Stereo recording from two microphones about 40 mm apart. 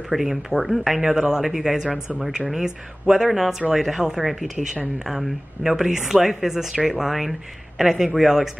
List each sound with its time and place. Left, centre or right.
0.1 s speech: centre
1.0 s a woman's voice: centre